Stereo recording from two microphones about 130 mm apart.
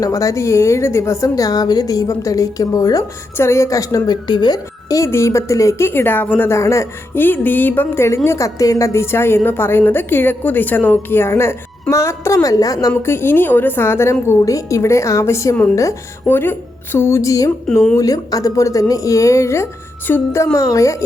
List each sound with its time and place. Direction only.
0.0 s a woman's voice: 25° left (ahead or behind)